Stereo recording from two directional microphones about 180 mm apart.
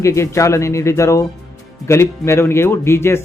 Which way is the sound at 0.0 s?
15° left (ahead or behind).